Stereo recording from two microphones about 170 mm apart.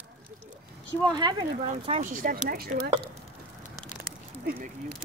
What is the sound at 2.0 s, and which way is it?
Speech, 55° right (ahead or behind).